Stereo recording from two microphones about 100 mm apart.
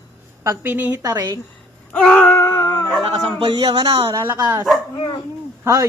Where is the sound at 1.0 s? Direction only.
40° right (ahead or behind).